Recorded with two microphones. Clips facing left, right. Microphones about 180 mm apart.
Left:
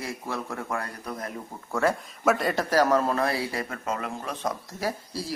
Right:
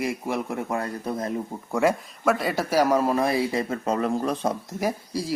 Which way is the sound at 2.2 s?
Centre (ahead or behind).